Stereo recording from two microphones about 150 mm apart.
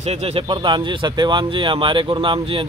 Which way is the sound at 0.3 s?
30° right (ahead or behind).